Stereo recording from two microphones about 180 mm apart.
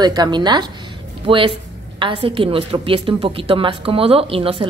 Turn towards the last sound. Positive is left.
turn(degrees=-30)  # may be behind; listen again after turning